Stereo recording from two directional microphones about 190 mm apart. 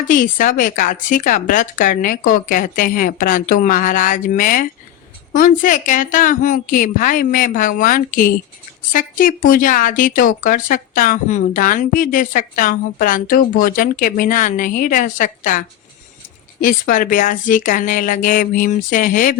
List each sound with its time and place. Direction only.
0.1 s speech: 45° left (ahead or behind)